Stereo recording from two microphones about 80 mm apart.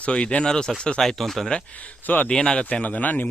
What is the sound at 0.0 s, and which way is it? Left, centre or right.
Speech, centre.